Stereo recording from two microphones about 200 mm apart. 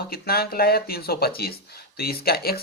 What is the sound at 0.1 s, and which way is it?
Speech, 50° left (ahead or behind).